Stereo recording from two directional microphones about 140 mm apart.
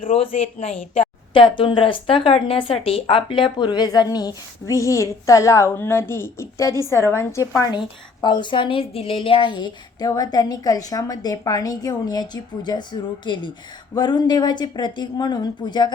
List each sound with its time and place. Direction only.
0.1 s a woman's voice: 45° left (ahead or behind); by 7.7 s 20° left (ahead or behind)
7.7 s a woman's voice: 30° left (ahead or behind)